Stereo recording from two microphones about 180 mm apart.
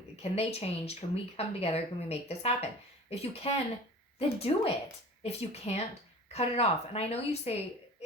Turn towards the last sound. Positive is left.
turn(degrees=35)  # may be behind; listen again after turning